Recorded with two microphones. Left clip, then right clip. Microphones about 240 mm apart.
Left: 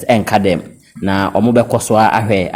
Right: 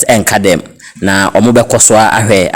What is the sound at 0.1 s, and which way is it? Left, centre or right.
A man's voice, right.